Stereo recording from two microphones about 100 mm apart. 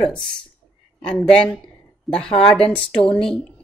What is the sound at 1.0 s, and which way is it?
A woman's voice, 10° left (ahead or behind).